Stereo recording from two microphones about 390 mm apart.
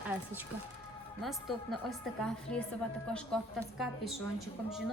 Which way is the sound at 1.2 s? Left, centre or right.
Centre.